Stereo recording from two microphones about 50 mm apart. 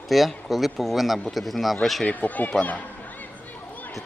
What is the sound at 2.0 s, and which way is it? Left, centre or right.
Speech, left.